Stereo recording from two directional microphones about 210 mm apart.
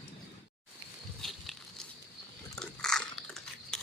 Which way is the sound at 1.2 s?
Centre (ahead or behind).